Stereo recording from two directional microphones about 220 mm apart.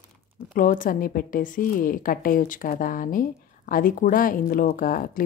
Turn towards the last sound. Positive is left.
turn(degrees=40)  # may be behind; listen again after turning